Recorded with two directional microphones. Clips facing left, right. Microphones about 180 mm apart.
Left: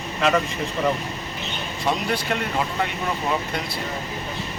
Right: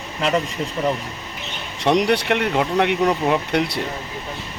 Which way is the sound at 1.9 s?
70° right (ahead or behind).